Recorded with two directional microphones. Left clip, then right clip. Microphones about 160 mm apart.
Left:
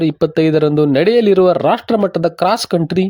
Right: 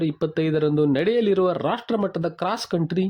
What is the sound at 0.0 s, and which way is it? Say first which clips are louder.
A man's voice: left 10 dB; 40° left (ahead or behind).